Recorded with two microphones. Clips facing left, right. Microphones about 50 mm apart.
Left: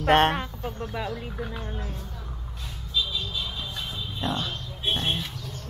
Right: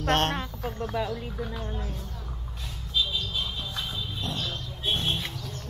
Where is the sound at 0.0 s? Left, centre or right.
Centre.